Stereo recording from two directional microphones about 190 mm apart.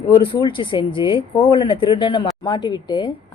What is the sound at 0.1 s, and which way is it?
Speech, 25° left (ahead or behind).